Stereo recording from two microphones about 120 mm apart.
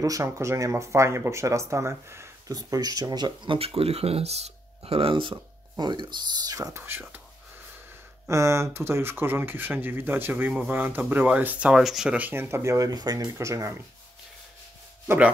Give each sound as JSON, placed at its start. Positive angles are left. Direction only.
{"t": 0.0, "sound": "speech", "side_deg": -25}
{"t": 8.3, "sound": "speech", "side_deg": -25}
{"t": 15.0, "sound": "speech", "side_deg": -10}